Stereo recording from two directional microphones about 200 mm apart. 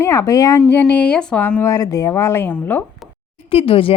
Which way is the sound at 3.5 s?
25° left (ahead or behind).